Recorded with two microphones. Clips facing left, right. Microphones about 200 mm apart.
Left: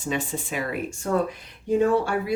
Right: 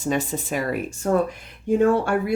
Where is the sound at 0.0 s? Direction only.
45° right (ahead or behind).